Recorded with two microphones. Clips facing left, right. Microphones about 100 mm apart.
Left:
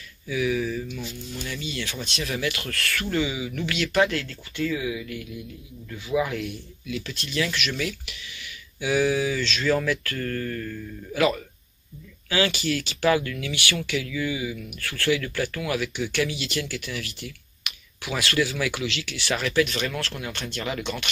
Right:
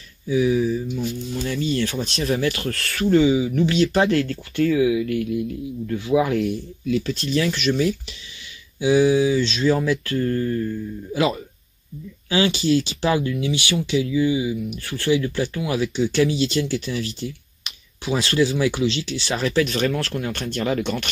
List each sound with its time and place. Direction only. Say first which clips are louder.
0.3 s speech: right 6 dB; 30° right (ahead or behind)
5.0 s speech: right 12 dB; 50° right (ahead or behind)
6.0 s speech: right 6 dB; 30° right (ahead or behind)